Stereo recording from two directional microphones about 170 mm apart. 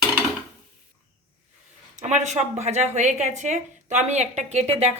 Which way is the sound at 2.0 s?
40° right (ahead or behind).